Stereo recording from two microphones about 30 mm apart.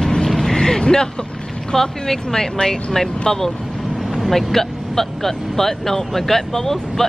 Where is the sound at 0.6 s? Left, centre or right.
Left.